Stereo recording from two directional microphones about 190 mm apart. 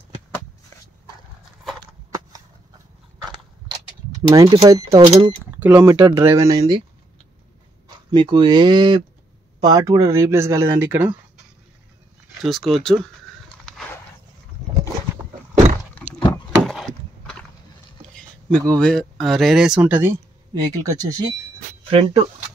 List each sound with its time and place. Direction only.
4.3 s speech: 20° right (ahead or behind)
5.9 s speech: 20° right (ahead or behind)
8.1 s speech: 25° right (ahead or behind)
12.4 s speech: centre (ahead or behind)
16.3 s a sound: 15° left (ahead or behind)
16.6 s wood: centre (ahead or behind)
18.1 s speech: 5° left (ahead or behind); by 22.3 s 30° right (ahead or behind)